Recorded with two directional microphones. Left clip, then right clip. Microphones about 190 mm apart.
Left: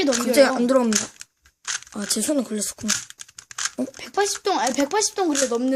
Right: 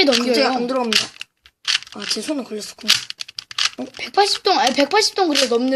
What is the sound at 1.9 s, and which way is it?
Speech, 55° left (ahead or behind).